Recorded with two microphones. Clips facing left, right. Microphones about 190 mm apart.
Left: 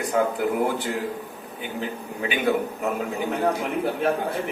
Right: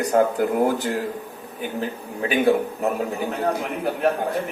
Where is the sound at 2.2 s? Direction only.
35° right (ahead or behind).